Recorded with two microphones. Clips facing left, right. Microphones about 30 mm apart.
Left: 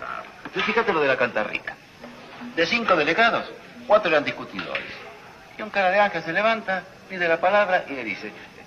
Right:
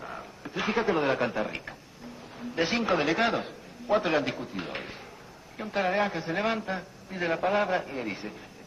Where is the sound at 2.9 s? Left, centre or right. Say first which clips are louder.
Left 8 dB; left.